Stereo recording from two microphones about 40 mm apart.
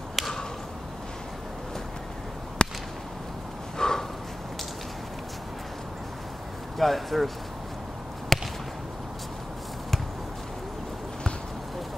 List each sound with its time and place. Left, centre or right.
0.2 s a sound: centre
2.6 s whip: left
3.7 s snort: centre
6.8 s speech: centre
8.3 s whip: centre